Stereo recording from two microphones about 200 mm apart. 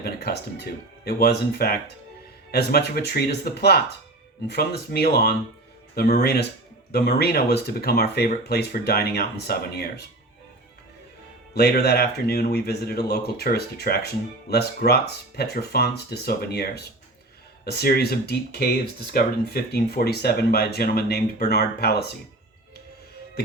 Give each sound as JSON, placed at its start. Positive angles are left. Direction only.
{"t": 0.0, "sound": "speech", "side_deg": 50}
{"t": 11.5, "sound": "speech", "side_deg": 50}